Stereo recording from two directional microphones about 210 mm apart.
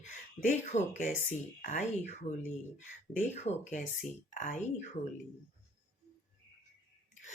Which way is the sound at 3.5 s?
30° left (ahead or behind).